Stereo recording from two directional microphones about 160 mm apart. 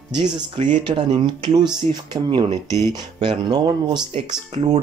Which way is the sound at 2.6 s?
15° left (ahead or behind).